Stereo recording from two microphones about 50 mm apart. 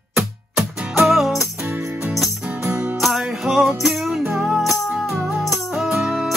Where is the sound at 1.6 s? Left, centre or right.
Right.